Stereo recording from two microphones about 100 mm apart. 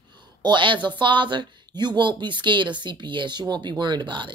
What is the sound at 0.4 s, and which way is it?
A woman's voice, 50° right (ahead or behind).